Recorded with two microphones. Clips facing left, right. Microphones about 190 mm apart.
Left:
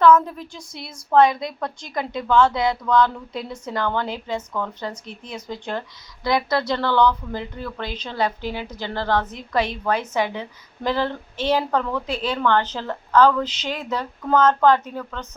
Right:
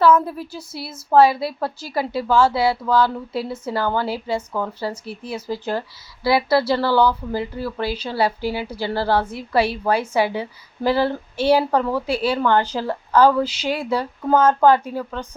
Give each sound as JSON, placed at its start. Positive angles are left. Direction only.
{"t": 0.3, "sound": "speech", "side_deg": -5}